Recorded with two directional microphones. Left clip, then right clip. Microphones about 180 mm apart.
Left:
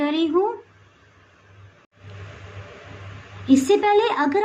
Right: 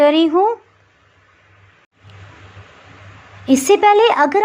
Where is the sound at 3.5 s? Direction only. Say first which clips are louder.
Right 6 dB; 25° right (ahead or behind).